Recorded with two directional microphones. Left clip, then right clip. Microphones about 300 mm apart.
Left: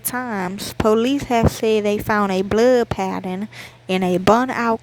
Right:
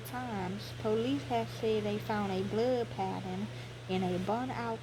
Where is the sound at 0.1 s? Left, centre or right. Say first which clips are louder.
Left 14 dB; left.